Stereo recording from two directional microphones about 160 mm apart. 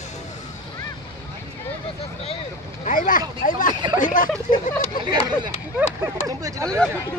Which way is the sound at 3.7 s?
30° right (ahead or behind).